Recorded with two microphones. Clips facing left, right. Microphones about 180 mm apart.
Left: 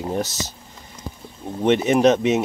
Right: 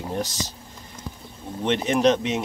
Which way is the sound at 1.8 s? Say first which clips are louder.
Left 1 dB; 5° left (ahead or behind).